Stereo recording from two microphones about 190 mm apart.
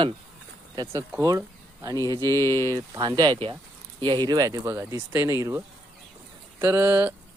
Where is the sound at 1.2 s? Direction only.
15° right (ahead or behind).